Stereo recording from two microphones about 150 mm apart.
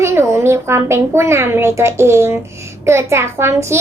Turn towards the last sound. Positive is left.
turn(degrees=-15)  # may be behind; listen again after turning